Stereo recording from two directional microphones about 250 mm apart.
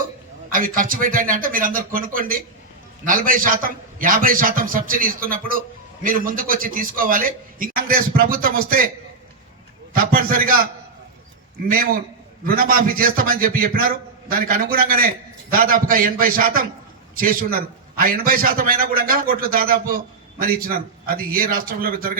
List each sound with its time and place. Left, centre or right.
0.5 s a man's voice: right
9.9 s a man's voice: right
11.7 s a man's voice: right